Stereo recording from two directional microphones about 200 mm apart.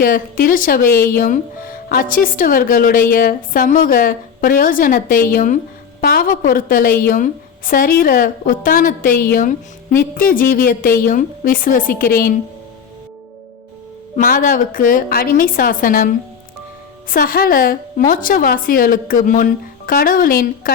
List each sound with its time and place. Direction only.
0.0 s speech: 45° left (ahead or behind)
14.2 s speech: 45° left (ahead or behind)
17.1 s speech: 45° left (ahead or behind)